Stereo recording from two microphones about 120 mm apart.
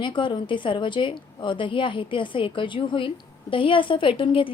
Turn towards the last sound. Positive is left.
turn(degrees=45)  # may be behind; listen again after turning